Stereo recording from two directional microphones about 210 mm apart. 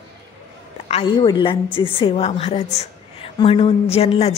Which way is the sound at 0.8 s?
25° left (ahead or behind).